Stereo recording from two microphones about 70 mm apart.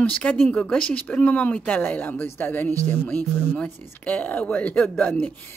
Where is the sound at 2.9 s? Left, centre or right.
Centre.